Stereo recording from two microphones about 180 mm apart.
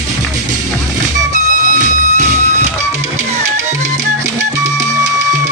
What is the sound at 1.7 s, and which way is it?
Music, 40° right (ahead or behind).